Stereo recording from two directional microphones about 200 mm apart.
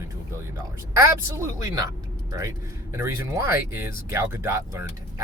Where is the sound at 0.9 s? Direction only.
15° right (ahead or behind).